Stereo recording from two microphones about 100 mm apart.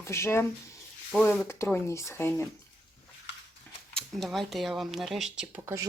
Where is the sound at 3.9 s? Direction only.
Centre (ahead or behind).